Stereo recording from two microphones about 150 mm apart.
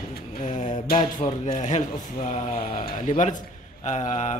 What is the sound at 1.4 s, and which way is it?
Speech, 50° left (ahead or behind).